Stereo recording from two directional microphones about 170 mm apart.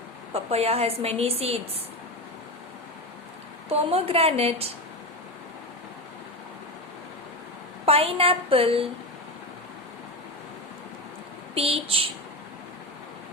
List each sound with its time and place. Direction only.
0.3 s a woman's voice: 35° right (ahead or behind)
3.7 s a woman's voice: 35° right (ahead or behind)
7.9 s a woman's voice: 35° right (ahead or behind)
11.5 s a woman's voice: 35° right (ahead or behind)